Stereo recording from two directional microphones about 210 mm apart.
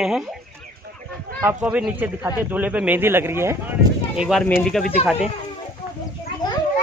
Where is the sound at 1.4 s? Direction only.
10° right (ahead or behind).